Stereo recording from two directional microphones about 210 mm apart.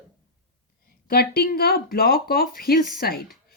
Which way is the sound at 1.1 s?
50° left (ahead or behind).